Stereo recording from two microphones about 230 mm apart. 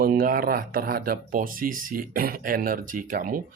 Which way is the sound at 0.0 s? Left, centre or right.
Right.